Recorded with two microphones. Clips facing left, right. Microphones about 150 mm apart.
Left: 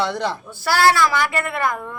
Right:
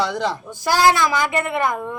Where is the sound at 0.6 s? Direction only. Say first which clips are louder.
Even; 15° right (ahead or behind).